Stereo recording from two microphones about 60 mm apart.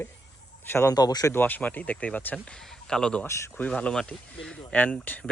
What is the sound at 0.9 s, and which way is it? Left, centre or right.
Speech, left.